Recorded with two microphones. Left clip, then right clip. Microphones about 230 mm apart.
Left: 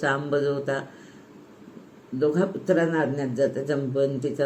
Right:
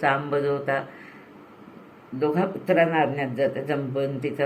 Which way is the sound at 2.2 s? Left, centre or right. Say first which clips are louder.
Left 1 dB; centre.